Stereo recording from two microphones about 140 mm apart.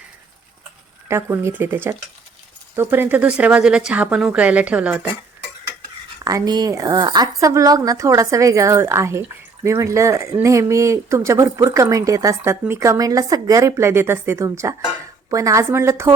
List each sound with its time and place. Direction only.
1.0 s speech: 20° right (ahead or behind)
6.2 s speech: 25° right (ahead or behind)